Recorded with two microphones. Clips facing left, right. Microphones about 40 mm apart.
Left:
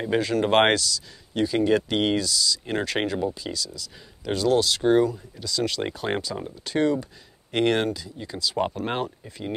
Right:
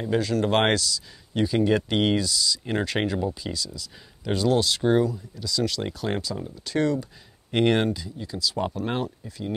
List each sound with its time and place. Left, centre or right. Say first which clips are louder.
0.0 s speech: left 1 dB; left
0.7 s speech: even; centre
4.8 s speech: left 2 dB; centre
7.5 s speech: right 1 dB; centre
8.2 s speech: left 3 dB; left